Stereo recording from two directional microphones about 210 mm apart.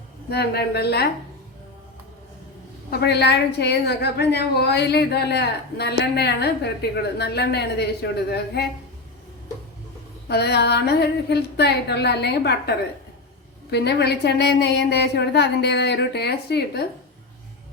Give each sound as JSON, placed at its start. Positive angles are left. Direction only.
{"t": 0.3, "sound": "a woman's voice", "side_deg": 50}
{"t": 2.9, "sound": "a woman's voice", "side_deg": 50}
{"t": 10.2, "sound": "a woman's voice", "side_deg": 50}